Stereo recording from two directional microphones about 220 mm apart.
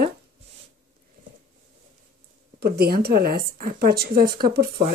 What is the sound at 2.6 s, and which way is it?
Speech, 45° right (ahead or behind).